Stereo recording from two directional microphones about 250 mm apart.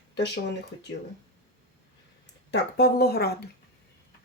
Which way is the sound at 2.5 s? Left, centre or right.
Left.